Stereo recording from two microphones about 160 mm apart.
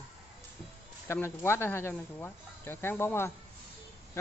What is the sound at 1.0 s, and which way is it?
Speech, 15° left (ahead or behind).